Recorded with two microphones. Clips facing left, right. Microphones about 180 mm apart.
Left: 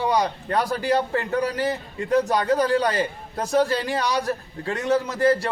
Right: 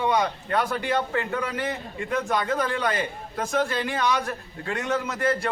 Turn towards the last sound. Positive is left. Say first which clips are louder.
# left 5 dB
turn(degrees=35)  # may be behind; listen again after turning